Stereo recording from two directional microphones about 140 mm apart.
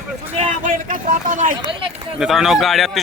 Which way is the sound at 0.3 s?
65° right (ahead or behind).